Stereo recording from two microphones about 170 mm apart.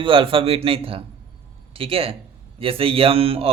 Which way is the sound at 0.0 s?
30° right (ahead or behind).